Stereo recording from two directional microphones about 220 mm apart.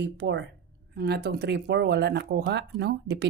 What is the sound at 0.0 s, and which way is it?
Speech, 50° right (ahead or behind).